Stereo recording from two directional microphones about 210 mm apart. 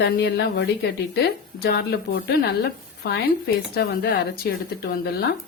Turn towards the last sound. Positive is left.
turn(degrees=45)  # may be behind; listen again after turning